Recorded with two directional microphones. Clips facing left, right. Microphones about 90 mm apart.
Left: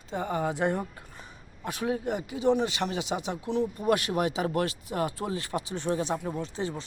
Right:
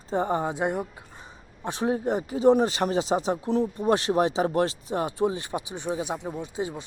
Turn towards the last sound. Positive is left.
turn(degrees=-15)  # may be behind; listen again after turning